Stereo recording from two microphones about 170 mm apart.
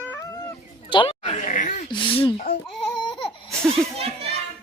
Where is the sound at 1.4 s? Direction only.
50° left (ahead or behind).